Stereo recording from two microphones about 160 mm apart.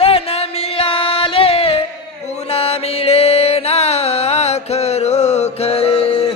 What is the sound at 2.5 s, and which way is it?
Music, 40° left (ahead or behind).